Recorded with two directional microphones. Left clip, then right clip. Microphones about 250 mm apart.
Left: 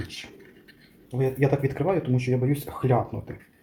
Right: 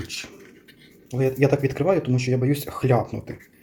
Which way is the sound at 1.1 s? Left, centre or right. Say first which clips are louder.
Right 4 dB; centre.